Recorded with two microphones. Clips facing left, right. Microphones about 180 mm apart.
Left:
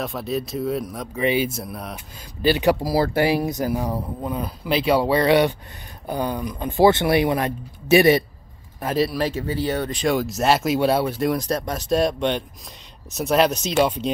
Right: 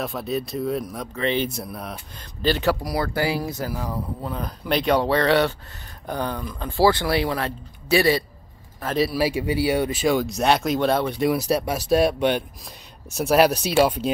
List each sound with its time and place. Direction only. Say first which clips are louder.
0.0 s speech: left 1 dB; centre (ahead or behind)
1.1 s speech: left 3 dB; 10° left (ahead or behind)
2.4 s speech: left 3 dB; 15° left (ahead or behind)
8.9 s speech: even; centre (ahead or behind)